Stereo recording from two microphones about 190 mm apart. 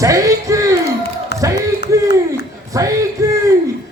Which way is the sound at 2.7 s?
15° right (ahead or behind).